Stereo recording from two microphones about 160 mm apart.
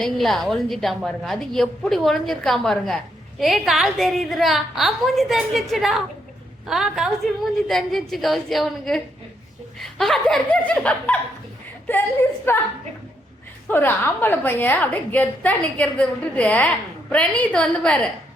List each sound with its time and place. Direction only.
0.0 s a woman's voice: centre (ahead or behind)
12.5 s a woman's voice: 15° left (ahead or behind)
13.7 s a woman's voice: 15° left (ahead or behind)